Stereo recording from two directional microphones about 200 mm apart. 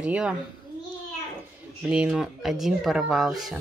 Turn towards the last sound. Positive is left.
turn(degrees=0)  # may be behind; listen again after turning